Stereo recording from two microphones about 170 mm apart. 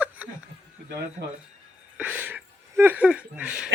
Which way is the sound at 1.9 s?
10° right (ahead or behind).